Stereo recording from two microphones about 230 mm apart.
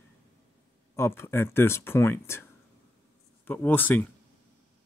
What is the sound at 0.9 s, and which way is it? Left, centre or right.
Speech, centre.